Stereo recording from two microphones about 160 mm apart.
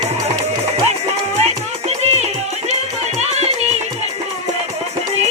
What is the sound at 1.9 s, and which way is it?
Music, 45° right (ahead or behind).